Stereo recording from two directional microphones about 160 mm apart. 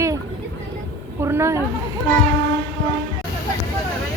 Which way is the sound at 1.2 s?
15° right (ahead or behind).